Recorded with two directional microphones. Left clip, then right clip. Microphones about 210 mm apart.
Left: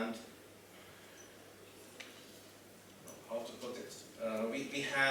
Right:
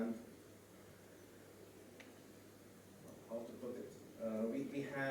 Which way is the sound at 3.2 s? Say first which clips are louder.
Left 6 dB; 30° right (ahead or behind).